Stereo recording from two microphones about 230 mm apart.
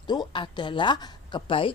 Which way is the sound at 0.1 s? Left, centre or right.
Centre.